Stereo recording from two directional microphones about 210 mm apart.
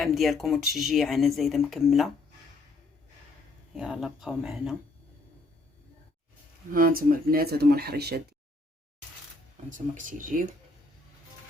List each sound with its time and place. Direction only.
0.0 s speech: centre (ahead or behind)
3.8 s speech: 5° right (ahead or behind)
6.7 s speech: 40° right (ahead or behind)
9.6 s speech: 40° right (ahead or behind)